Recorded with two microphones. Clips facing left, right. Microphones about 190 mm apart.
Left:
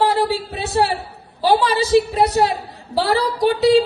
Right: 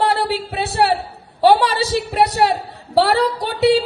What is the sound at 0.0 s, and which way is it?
A woman's voice, 65° right (ahead or behind).